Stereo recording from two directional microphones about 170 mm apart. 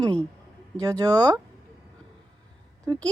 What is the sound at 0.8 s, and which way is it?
Speech, 20° right (ahead or behind).